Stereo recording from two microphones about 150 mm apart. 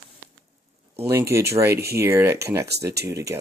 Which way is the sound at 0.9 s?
15° right (ahead or behind).